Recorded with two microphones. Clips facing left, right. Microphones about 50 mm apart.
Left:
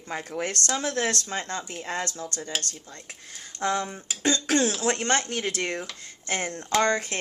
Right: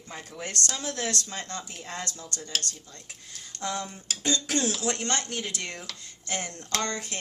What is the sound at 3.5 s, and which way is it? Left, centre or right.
Speech, left.